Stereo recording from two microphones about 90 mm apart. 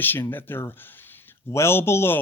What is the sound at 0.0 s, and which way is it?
Speech, 25° left (ahead or behind).